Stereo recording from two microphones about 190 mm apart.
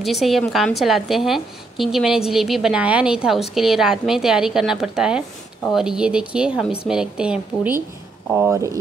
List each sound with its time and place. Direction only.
0.0 s a woman's voice: centre (ahead or behind)